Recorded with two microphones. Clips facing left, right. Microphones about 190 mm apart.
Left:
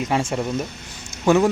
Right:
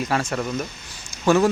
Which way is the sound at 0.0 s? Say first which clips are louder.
Left 2 dB; 25° left (ahead or behind).